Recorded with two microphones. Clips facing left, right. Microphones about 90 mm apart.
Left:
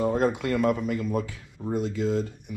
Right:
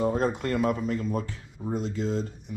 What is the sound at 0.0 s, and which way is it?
Speech, 5° left (ahead or behind).